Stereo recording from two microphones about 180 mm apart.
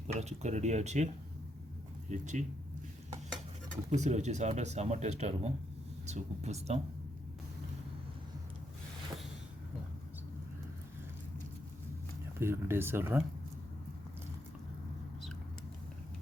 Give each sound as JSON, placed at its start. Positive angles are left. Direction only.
{"t": 0.1, "sound": "speech", "side_deg": -40}
{"t": 3.8, "sound": "speech", "side_deg": -40}
{"t": 12.4, "sound": "speech", "side_deg": -15}